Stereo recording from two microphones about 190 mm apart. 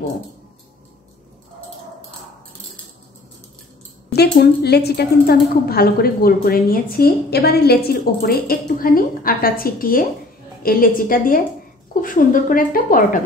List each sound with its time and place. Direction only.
4.1 s a woman's voice: 60° left (ahead or behind)